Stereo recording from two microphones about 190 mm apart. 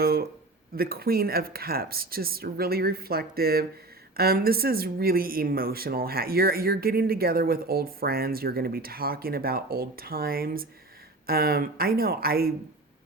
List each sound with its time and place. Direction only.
0.0 s speech: 55° right (ahead or behind)